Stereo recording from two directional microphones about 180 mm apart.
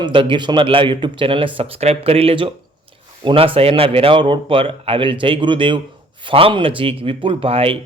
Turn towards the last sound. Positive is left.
turn(degrees=-30)  # may be behind; listen again after turning